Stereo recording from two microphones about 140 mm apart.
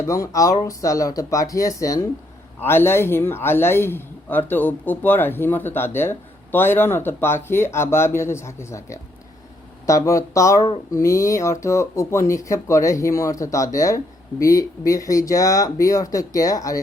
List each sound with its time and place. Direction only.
0.0 s speech: 25° left (ahead or behind)